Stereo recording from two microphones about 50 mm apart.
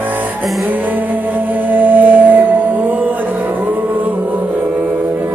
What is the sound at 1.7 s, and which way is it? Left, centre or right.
Music, right.